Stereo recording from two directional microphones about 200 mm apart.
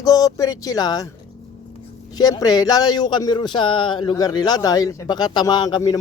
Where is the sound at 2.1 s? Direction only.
20° left (ahead or behind).